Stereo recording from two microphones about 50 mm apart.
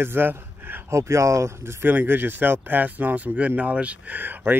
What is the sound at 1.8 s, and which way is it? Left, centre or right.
Speech, right.